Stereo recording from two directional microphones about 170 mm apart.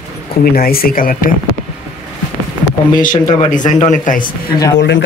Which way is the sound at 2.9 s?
50° left (ahead or behind).